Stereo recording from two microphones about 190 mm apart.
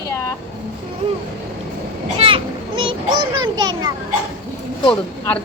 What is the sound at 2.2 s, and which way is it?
A child's voice, 25° right (ahead or behind).